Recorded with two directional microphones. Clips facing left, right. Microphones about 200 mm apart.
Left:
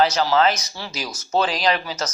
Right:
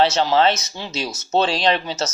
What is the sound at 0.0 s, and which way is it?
Speech, 25° right (ahead or behind).